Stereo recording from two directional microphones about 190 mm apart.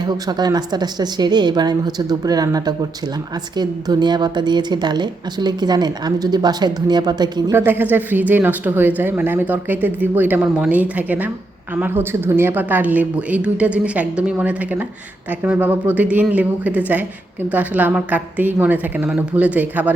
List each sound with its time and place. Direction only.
0.0 s a woman's voice: 20° right (ahead or behind)
7.5 s speech: 10° right (ahead or behind)